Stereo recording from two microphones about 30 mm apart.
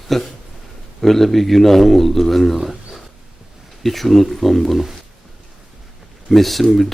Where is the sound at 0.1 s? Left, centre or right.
Centre.